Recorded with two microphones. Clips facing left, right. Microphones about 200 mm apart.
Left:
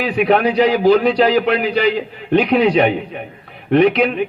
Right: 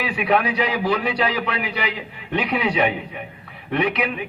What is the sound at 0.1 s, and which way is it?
A man's voice, 35° left (ahead or behind).